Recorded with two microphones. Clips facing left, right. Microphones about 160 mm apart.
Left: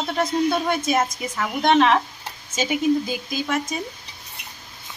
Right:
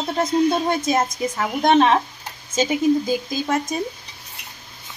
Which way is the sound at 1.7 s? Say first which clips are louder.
Right 1 dB; 30° right (ahead or behind).